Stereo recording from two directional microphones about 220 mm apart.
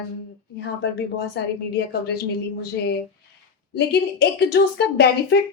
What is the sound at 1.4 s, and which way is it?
Speech, 50° left (ahead or behind).